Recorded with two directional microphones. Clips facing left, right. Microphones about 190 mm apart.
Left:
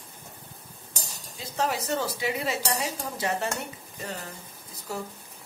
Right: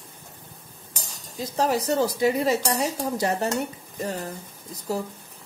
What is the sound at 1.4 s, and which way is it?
Speech, 40° right (ahead or behind).